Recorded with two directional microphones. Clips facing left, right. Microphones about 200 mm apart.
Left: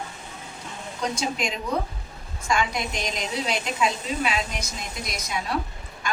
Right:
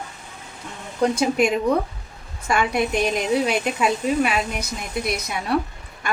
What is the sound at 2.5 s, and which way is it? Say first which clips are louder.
A woman's voice: right 5 dB; 60° right (ahead or behind).